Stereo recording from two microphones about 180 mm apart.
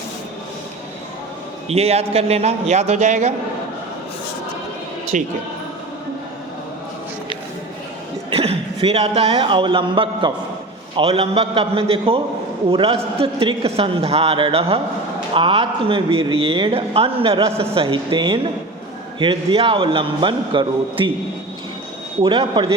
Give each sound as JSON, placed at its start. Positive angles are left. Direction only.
{"t": 1.6, "sound": "a man's voice", "side_deg": -35}
{"t": 5.1, "sound": "speech", "side_deg": -45}
{"t": 8.3, "sound": "a woman's voice", "side_deg": -35}
{"t": 22.2, "sound": "a woman's voice", "side_deg": -25}